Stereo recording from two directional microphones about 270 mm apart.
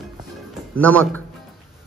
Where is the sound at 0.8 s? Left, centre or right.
Centre.